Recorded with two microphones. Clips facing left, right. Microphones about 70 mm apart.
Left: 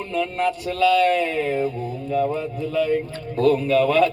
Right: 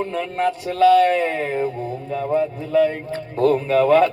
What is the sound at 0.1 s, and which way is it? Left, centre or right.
A man's voice, right.